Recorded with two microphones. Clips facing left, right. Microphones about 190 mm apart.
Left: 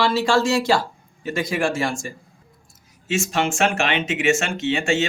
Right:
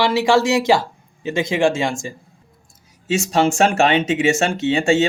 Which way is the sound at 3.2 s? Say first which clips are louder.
Right 5 dB; 35° right (ahead or behind).